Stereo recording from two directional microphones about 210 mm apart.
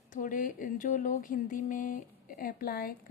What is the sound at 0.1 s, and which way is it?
Speech, 40° left (ahead or behind).